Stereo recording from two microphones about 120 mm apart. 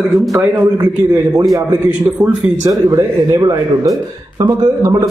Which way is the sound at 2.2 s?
30° right (ahead or behind).